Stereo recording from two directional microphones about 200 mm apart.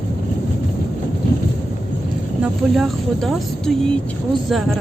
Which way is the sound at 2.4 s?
Centre (ahead or behind).